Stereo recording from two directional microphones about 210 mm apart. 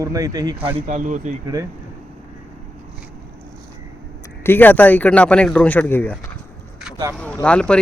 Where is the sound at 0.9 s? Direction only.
35° right (ahead or behind).